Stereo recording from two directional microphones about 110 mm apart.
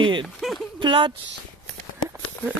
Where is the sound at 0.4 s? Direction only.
Centre (ahead or behind).